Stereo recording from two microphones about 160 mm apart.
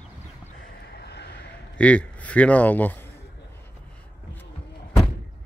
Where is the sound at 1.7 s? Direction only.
10° left (ahead or behind).